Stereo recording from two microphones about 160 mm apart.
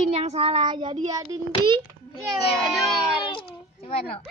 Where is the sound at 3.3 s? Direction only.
35° left (ahead or behind).